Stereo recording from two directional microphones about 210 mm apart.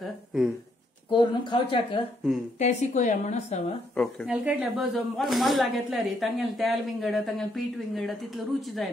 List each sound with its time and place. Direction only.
0.0 s a sound: centre (ahead or behind)
1.1 s speech: 25° left (ahead or behind)
2.6 s a woman's voice: 35° left (ahead or behind)
3.9 s speech: 5° left (ahead or behind)